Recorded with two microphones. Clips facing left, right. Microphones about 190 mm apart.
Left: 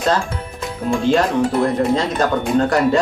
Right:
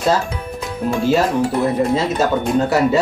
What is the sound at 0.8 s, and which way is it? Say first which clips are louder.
Speech: even; 5° right (ahead or behind).